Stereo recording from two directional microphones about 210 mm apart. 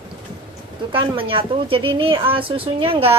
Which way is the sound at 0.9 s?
25° right (ahead or behind).